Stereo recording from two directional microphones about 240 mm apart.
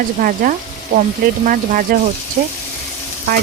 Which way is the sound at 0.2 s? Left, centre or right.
Right.